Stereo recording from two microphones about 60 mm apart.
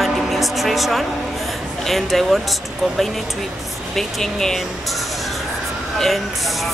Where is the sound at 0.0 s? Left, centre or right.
Centre.